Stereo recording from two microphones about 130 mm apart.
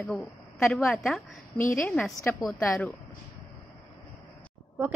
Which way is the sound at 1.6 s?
15° left (ahead or behind).